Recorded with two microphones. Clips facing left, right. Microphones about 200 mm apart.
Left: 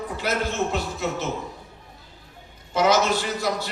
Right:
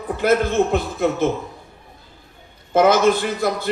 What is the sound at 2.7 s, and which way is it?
Speech, 55° right (ahead or behind).